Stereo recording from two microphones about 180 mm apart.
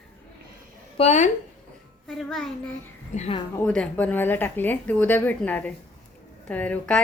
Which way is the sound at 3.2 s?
35° left (ahead or behind).